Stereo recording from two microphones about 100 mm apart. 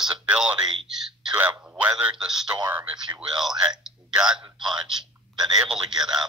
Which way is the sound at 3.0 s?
45° right (ahead or behind).